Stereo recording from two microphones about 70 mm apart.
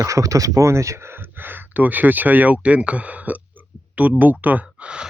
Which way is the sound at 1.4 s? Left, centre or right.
Right.